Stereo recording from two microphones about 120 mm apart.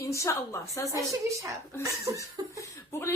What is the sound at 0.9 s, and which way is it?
Speech, 25° right (ahead or behind).